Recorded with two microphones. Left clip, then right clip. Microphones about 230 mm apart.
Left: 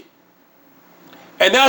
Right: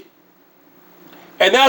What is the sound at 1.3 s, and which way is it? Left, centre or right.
Speech, left.